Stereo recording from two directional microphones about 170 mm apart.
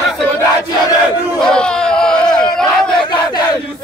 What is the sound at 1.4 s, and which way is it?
Crowd, 5° left (ahead or behind).